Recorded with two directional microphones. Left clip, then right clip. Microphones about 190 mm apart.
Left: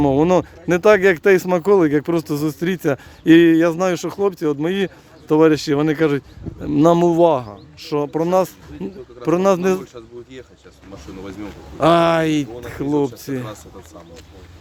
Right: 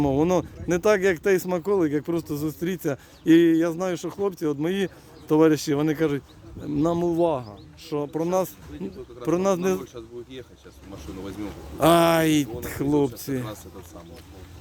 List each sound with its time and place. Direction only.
0.0 s speech: 20° left (ahead or behind)
9.8 s speech: 10° left (ahead or behind)